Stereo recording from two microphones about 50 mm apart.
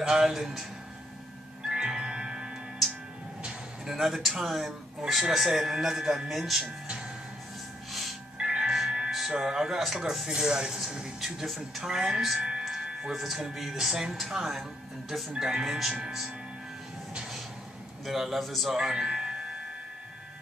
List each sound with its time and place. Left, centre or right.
0.0 s speech: centre
1.7 s music: centre
3.8 s speech: centre
8.4 s music: centre
8.6 s music: centre
9.4 s speech: centre
12.4 s music: centre
13.2 s speech: centre
18.0 s speech: centre
18.8 s speech: centre